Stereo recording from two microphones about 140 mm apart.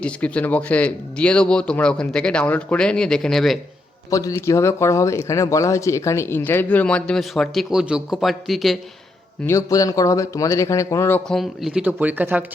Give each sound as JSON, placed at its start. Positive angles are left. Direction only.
{"t": 0.0, "sound": "speech", "side_deg": 10}
{"t": 4.1, "sound": "speech", "side_deg": 25}
{"t": 9.4, "sound": "speech", "side_deg": 20}
{"t": 11.3, "sound": "speech", "side_deg": 0}